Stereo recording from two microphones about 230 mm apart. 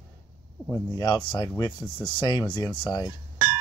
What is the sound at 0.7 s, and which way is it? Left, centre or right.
Speech, centre.